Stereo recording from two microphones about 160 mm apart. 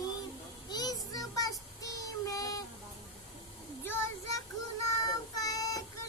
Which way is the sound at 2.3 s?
20° left (ahead or behind).